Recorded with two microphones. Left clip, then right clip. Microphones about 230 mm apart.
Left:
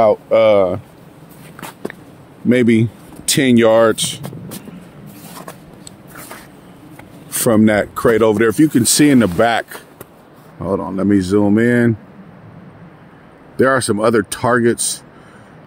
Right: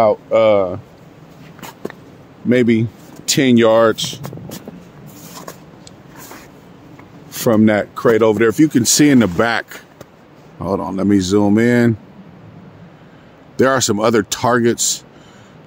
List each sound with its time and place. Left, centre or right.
0.0 s speech: centre
1.6 s a sound: centre
2.5 s speech: left
7.2 s speech: left; by 11.9 s centre
13.6 s speech: centre